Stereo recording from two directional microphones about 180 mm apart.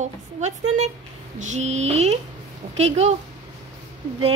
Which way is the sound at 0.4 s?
40° right (ahead or behind).